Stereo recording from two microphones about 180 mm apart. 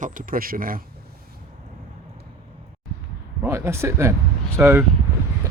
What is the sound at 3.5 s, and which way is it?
Speech, 15° right (ahead or behind).